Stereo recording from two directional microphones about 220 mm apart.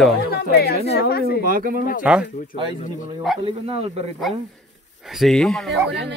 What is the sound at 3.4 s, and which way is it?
Speech, 25° right (ahead or behind).